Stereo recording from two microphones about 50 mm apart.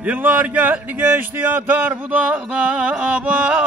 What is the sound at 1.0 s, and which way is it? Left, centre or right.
Speech, right.